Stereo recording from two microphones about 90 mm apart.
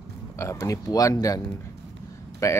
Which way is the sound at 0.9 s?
40° left (ahead or behind).